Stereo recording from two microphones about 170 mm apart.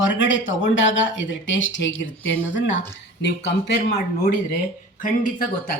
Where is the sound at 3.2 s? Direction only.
90° left.